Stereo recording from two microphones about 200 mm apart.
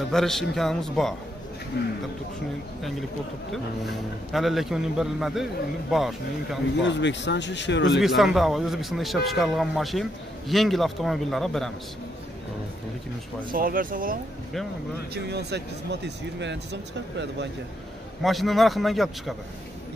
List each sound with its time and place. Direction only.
0.1 s speech: centre (ahead or behind)
1.8 s speech: 55° left (ahead or behind)
3.8 s speech: centre (ahead or behind)
6.8 s speech: 65° left (ahead or behind)
8.0 s speech: centre (ahead or behind)
13.5 s speech: 45° right (ahead or behind)
15.2 s speech: 55° right (ahead or behind)
18.2 s speech: centre (ahead or behind)